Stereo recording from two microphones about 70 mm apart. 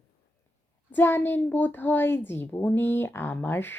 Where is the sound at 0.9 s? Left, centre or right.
Left.